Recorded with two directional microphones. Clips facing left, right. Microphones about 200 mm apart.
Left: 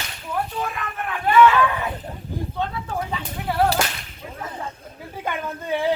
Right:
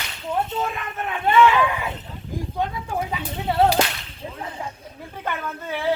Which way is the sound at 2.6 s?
15° right (ahead or behind).